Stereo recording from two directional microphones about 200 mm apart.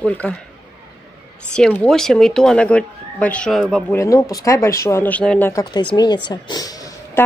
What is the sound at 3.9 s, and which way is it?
Speech, 15° left (ahead or behind).